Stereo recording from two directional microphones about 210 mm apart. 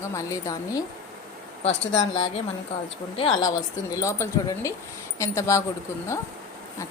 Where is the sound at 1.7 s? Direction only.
60° left (ahead or behind).